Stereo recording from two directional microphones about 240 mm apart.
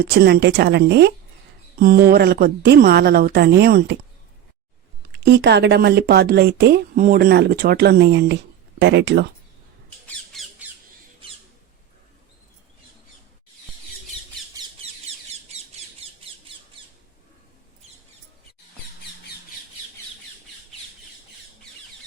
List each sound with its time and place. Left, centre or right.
0.0 s a woman's voice: right
5.1 s speech: right
10.1 s squawk: centre